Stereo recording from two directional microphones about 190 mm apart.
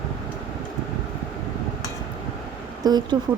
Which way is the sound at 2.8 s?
20° right (ahead or behind).